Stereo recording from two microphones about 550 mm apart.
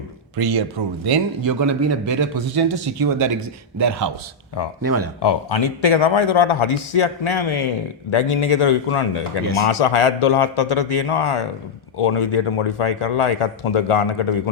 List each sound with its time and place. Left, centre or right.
0.3 s a man's voice: right
2.6 s a man's voice: right
5.2 s speech: left